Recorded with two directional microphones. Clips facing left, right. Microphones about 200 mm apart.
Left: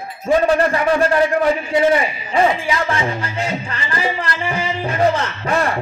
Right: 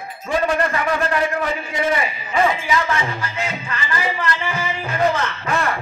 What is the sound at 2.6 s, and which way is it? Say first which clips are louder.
Music: left 1 dB; 30° left (ahead or behind).